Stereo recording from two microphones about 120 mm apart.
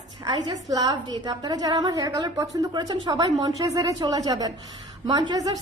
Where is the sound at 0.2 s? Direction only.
40° right (ahead or behind).